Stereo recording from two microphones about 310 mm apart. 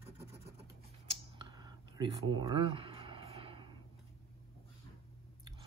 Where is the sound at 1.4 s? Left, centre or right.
Centre.